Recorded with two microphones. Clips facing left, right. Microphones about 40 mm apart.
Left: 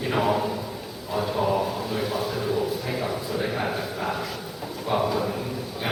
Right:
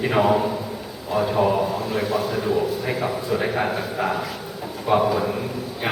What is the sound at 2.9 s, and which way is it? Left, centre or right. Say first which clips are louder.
Speech: right 4 dB; centre.